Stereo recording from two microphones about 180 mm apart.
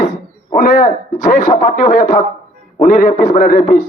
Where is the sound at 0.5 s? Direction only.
50° left (ahead or behind).